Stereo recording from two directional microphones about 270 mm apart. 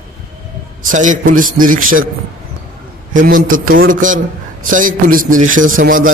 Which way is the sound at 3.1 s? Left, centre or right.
Right.